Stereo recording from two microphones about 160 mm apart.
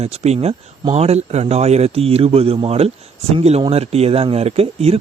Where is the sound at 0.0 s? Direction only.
40° right (ahead or behind).